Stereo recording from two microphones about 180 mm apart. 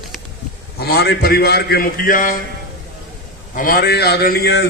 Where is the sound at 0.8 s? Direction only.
60° left (ahead or behind).